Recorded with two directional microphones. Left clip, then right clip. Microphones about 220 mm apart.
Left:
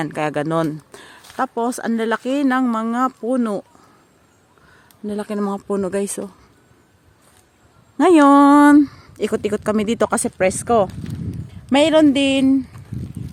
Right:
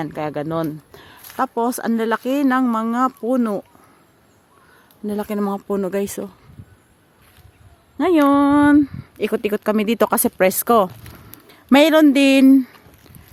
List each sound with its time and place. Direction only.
0.0 s speech: 5° left (ahead or behind)
5.0 s speech: 5° right (ahead or behind)
7.9 s speech: 15° left (ahead or behind); by 12.6 s 20° right (ahead or behind)
12.9 s a sound: 5° left (ahead or behind)